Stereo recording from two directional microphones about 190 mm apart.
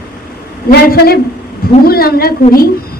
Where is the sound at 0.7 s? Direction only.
55° left (ahead or behind).